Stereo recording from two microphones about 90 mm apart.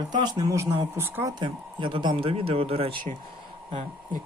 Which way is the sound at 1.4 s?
60° right (ahead or behind).